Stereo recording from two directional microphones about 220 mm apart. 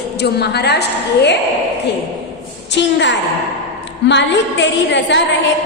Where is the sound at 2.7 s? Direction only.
50° left (ahead or behind).